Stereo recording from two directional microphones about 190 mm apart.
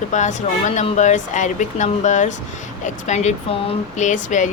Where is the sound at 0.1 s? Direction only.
40° left (ahead or behind).